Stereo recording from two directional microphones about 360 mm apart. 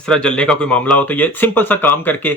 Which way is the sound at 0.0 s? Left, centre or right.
Centre.